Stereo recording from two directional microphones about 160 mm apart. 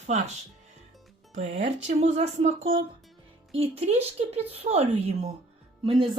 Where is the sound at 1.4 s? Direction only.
45° right (ahead or behind).